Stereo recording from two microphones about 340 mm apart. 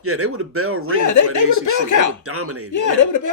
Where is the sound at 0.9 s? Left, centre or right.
Left.